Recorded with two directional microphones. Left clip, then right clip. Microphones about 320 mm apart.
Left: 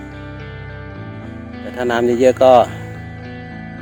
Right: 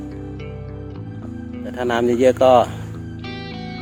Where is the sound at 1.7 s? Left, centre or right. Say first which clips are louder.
Left 2 dB; centre.